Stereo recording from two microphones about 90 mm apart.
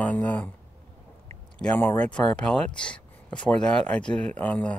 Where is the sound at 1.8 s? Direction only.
20° left (ahead or behind).